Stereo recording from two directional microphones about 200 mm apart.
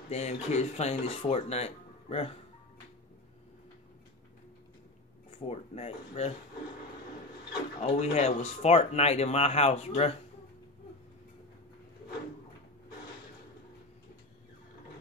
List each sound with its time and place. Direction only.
0.1 s speech: 35° left (ahead or behind)
5.3 s speech: 30° left (ahead or behind)
7.8 s speech: 30° left (ahead or behind)